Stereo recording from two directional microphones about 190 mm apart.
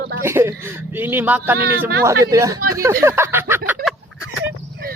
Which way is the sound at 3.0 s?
10° right (ahead or behind).